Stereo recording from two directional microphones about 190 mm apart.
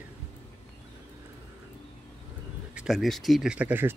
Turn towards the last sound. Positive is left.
turn(degrees=-10)  # may be behind; listen again after turning